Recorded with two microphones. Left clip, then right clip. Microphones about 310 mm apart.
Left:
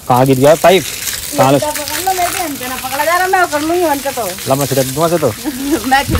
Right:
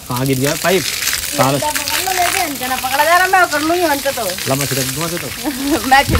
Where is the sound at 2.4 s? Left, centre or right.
Centre.